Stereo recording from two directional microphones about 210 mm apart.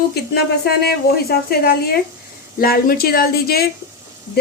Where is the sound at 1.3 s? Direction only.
45° left (ahead or behind).